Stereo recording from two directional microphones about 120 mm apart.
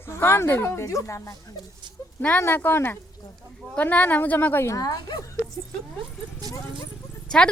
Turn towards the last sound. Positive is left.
turn(degrees=5)  # may be behind; listen again after turning